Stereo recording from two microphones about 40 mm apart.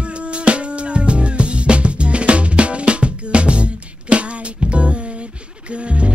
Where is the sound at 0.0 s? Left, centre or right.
Right.